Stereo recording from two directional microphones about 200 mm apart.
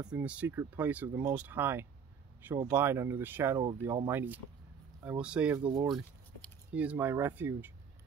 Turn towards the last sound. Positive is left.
turn(degrees=-10)  # may be behind; listen again after turning